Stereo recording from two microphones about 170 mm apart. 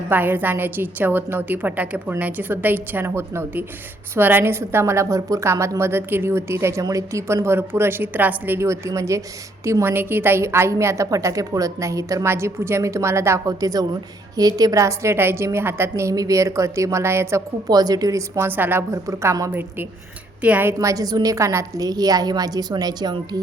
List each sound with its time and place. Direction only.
0.1 s a woman's voice: 10° right (ahead or behind)